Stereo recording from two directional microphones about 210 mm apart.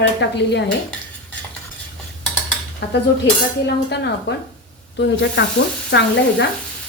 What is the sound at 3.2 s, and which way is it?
Speech, 55° left (ahead or behind).